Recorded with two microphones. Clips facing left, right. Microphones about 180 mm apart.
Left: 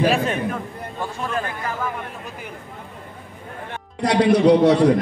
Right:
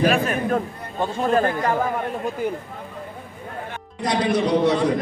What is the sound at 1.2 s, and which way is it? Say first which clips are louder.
Speech: right 8 dB; 40° right (ahead or behind).